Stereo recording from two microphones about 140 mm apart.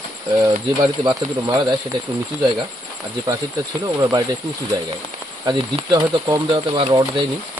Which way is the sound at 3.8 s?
25° right (ahead or behind).